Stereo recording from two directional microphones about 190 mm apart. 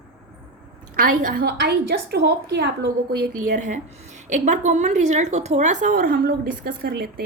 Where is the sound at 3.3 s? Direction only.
45° right (ahead or behind).